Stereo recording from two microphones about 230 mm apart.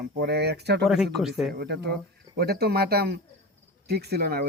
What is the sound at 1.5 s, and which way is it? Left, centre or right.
Speech, right.